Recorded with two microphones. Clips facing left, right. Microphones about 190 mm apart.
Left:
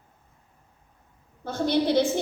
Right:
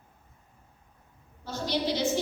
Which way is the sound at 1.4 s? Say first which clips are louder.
Left 6 dB; 55° left (ahead or behind).